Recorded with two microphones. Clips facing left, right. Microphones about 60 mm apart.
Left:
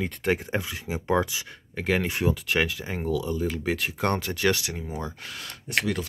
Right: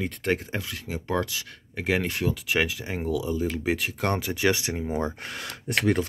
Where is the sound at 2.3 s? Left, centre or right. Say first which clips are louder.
Even; centre.